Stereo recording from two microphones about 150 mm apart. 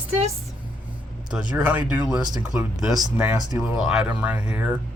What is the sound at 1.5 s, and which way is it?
Speech, 10° right (ahead or behind).